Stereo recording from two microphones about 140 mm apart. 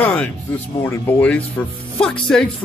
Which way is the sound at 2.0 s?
5° left (ahead or behind).